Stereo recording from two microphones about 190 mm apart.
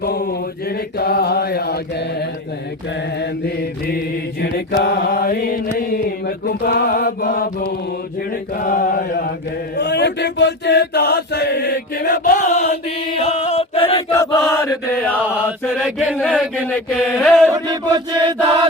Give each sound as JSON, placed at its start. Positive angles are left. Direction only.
{"t": 0.0, "sound": "mantra", "side_deg": 55}
{"t": 8.5, "sound": "mantra", "side_deg": 45}
{"t": 9.7, "sound": "chant", "side_deg": 65}
{"t": 14.5, "sound": "mantra", "side_deg": 10}
{"t": 15.7, "sound": "music", "side_deg": -5}
{"t": 16.3, "sound": "speech", "side_deg": -5}
{"t": 17.0, "sound": "music", "side_deg": 0}
{"t": 17.5, "sound": "chant", "side_deg": -20}